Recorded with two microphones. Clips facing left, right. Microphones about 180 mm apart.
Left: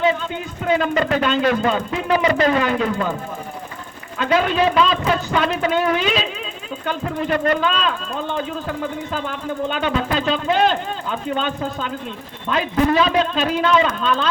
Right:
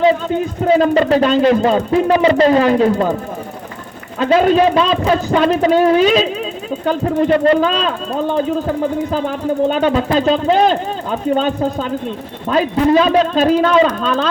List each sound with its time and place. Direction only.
0.0 s speech: 35° right (ahead or behind)
4.2 s speech: 40° right (ahead or behind)